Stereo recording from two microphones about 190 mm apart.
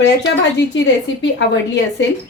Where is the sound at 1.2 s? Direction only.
65° left (ahead or behind).